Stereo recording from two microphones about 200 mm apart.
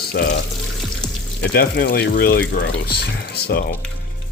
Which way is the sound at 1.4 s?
50° left (ahead or behind).